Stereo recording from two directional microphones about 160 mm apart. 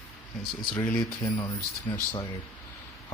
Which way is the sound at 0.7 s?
10° left (ahead or behind).